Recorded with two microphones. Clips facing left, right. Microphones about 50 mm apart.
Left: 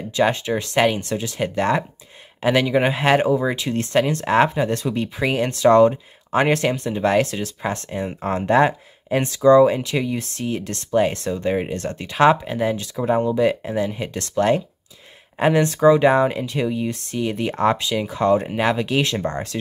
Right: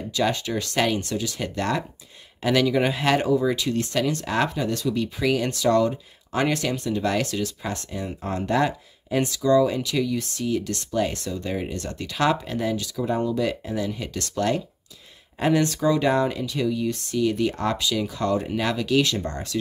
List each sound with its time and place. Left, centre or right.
0.1 s speech: left